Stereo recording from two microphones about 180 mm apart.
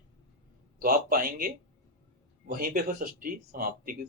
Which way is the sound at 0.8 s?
55° right (ahead or behind).